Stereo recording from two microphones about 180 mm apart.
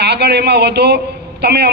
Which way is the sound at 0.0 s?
65° right (ahead or behind).